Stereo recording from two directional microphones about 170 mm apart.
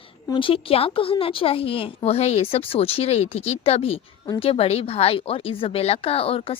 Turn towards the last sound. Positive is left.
turn(degrees=35)  # may be behind; listen again after turning